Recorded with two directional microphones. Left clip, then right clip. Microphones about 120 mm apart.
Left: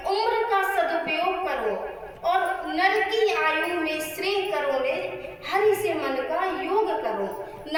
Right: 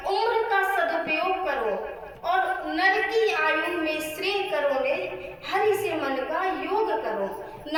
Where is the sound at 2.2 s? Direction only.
20° left (ahead or behind).